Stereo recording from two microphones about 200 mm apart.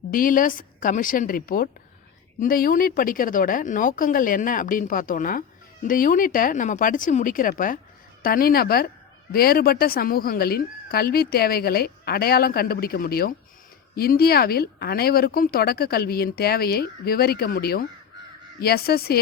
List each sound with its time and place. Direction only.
0.1 s speech: 45° left (ahead or behind)